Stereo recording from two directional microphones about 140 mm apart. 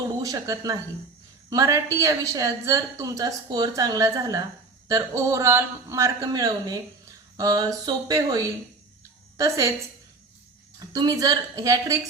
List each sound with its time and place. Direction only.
0.2 s a woman's voice: 25° right (ahead or behind)
10.9 s a woman's voice: 25° right (ahead or behind)